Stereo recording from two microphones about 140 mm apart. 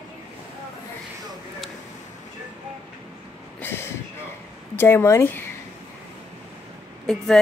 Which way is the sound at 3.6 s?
15° left (ahead or behind).